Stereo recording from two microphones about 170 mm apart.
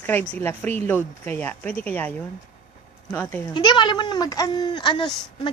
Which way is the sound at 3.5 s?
25° left (ahead or behind).